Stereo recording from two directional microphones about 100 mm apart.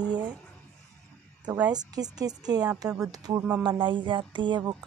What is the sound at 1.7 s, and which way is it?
A woman's voice, 40° right (ahead or behind).